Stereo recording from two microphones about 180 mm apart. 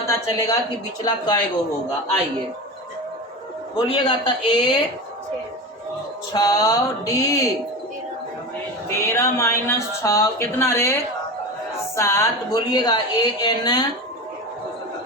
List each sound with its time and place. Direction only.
0.1 s a woman's voice: 20° left (ahead or behind)
3.9 s a woman's voice: 25° left (ahead or behind)
6.3 s a woman's voice: 20° left (ahead or behind)
8.9 s speech: 15° left (ahead or behind)
11.9 s a woman's voice: 15° left (ahead or behind)